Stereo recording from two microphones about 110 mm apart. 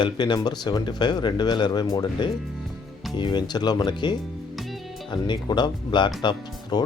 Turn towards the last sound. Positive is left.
turn(degrees=40)  # may be behind; listen again after turning